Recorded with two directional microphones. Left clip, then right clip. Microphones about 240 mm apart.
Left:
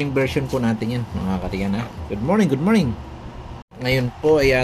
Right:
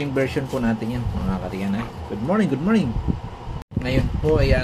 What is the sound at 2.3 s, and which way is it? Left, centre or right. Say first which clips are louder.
Speech: left 2 dB; left.